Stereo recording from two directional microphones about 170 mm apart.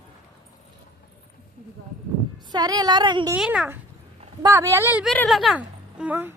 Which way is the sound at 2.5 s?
25° right (ahead or behind).